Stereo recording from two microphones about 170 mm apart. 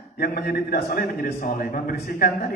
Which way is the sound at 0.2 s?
60° left (ahead or behind).